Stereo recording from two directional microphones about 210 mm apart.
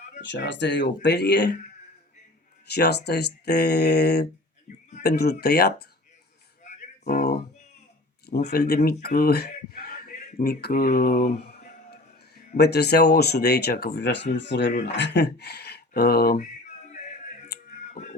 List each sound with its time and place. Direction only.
0.2 s speech: 55° left (ahead or behind)
2.6 s speech: 50° left (ahead or behind)
7.0 s a sound: 50° left (ahead or behind)
8.4 s speech: 45° left (ahead or behind)
12.5 s speech: 50° left (ahead or behind)